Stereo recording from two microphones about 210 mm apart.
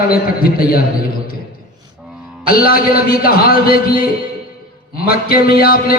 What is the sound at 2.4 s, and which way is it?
Music, 45° left (ahead or behind).